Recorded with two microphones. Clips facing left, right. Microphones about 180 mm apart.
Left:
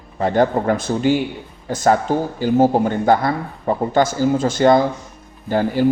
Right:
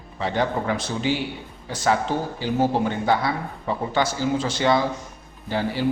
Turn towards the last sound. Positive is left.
turn(degrees=50)  # may be behind; listen again after turning